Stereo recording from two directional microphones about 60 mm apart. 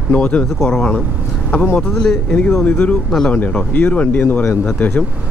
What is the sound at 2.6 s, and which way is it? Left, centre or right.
Speech, left.